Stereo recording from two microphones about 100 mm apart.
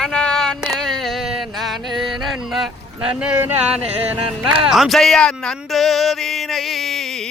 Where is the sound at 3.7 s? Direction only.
15° right (ahead or behind).